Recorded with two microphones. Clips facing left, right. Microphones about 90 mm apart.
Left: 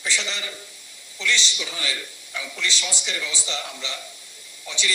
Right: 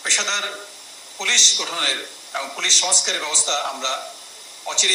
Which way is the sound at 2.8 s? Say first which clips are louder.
Right 5 dB; 70° right (ahead or behind).